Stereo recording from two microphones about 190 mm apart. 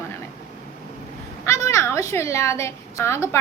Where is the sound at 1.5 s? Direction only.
15° left (ahead or behind).